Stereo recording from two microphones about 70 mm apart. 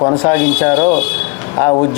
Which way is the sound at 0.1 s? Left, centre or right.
Centre.